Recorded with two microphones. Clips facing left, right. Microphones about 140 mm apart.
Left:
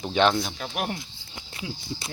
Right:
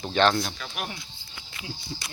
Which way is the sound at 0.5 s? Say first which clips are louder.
Left 5 dB; 50° left (ahead or behind).